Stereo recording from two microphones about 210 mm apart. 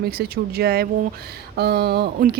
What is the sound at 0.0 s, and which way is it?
Speech, 45° right (ahead or behind).